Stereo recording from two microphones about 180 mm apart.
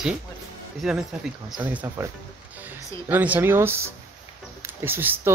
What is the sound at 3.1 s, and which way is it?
Speech, 10° right (ahead or behind).